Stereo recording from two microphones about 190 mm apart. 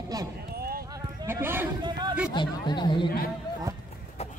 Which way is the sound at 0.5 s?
50° right (ahead or behind).